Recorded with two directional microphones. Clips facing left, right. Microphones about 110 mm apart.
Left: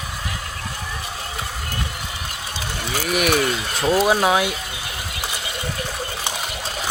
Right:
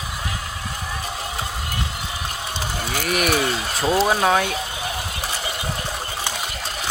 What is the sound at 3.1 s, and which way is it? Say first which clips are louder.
Speech: left 2 dB; centre (ahead or behind).